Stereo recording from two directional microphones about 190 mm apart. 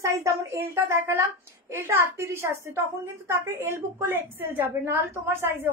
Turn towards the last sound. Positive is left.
turn(degrees=-10)  # may be behind; listen again after turning